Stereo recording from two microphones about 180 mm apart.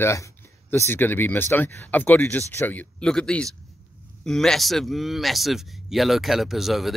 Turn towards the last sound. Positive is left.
turn(degrees=0)  # may be behind; listen again after turning